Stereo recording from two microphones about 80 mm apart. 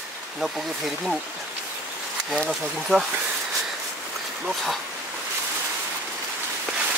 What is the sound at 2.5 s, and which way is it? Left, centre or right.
Speech, centre.